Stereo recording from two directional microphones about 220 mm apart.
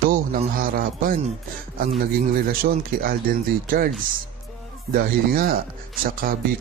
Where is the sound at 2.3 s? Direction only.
40° right (ahead or behind).